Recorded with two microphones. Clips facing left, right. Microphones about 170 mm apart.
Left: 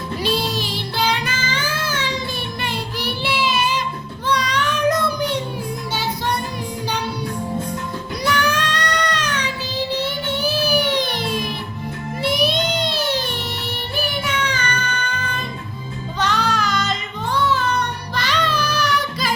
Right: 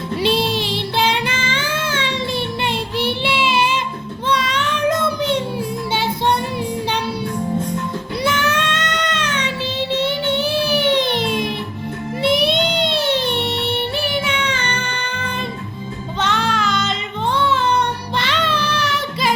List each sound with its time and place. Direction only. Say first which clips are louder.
0.2 s music: right 4 dB; 25° right (ahead or behind)
2.6 s child singing: right 5 dB; 25° right (ahead or behind)
5.9 s music: right 5 dB; 25° right (ahead or behind)
8.2 s child singing: right 1 dB; 25° right (ahead or behind)
9.9 s music: right 7 dB; 25° right (ahead or behind)